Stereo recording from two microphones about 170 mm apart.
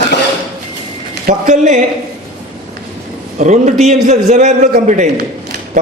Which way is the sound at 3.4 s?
45° right (ahead or behind).